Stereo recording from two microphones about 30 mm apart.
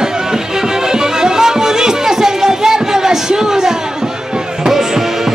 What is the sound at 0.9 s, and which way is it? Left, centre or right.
Music, right.